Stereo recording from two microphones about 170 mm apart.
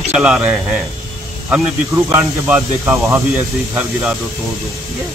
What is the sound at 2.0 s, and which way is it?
A man's voice, 10° right (ahead or behind).